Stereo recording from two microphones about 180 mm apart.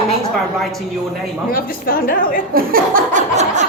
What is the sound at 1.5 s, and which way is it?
Speech, 55° left (ahead or behind).